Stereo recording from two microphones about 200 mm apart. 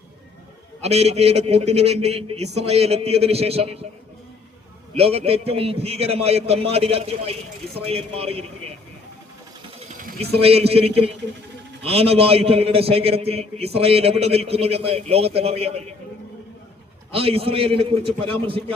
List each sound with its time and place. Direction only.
0.8 s speech: 30° right (ahead or behind)
4.9 s a man's voice: 30° right (ahead or behind)
9.9 s a sound: 45° right (ahead or behind)
10.2 s a man's voice: 30° right (ahead or behind)
17.1 s a man's voice: 30° right (ahead or behind)